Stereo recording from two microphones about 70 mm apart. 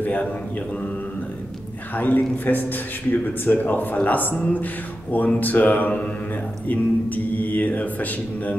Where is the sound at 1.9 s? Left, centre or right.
Left.